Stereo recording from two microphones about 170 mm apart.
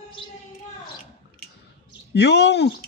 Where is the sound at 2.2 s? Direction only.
90° left.